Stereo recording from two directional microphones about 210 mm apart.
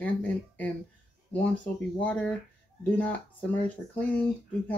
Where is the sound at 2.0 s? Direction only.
5° left (ahead or behind).